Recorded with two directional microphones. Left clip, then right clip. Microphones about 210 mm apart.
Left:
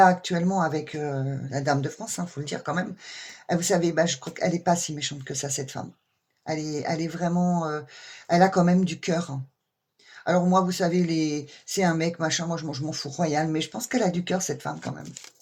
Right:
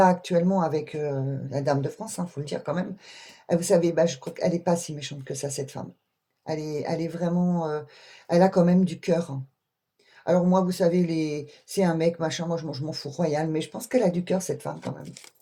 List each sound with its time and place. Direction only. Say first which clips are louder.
0.0 s speech: left 1 dB; 30° left (ahead or behind)